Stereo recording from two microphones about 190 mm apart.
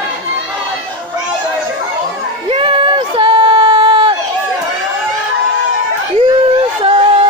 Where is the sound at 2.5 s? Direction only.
25° right (ahead or behind).